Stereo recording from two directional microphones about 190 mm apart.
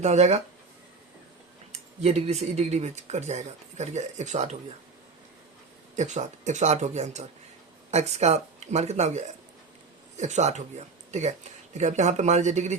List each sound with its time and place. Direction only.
0.0 s speech: 35° right (ahead or behind)
2.0 s speech: 35° right (ahead or behind)
6.0 s speech: 40° right (ahead or behind)